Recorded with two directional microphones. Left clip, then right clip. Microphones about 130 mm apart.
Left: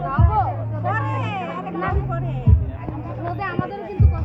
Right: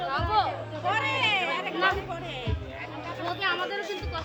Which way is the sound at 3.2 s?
30° left (ahead or behind).